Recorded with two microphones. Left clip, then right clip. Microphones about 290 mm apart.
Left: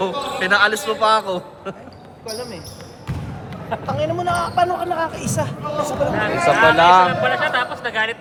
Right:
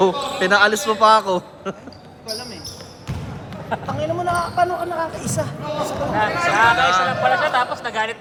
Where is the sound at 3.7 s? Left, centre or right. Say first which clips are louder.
Right 1 dB; right.